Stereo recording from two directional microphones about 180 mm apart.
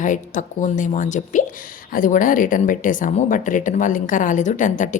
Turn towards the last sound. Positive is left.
turn(degrees=45)  # may be behind; listen again after turning